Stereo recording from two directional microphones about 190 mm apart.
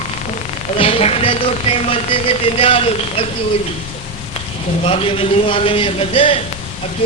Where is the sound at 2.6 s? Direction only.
30° left (ahead or behind).